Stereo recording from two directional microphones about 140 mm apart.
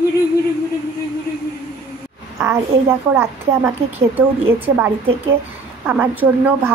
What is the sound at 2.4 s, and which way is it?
A woman's voice, 20° right (ahead or behind).